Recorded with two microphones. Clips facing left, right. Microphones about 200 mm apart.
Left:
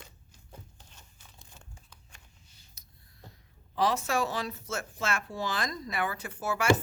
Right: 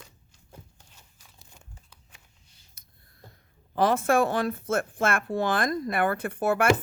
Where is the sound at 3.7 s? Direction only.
55° right (ahead or behind).